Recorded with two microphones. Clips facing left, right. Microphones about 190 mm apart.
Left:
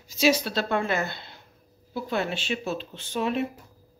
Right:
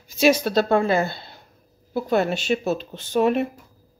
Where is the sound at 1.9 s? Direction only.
45° right (ahead or behind).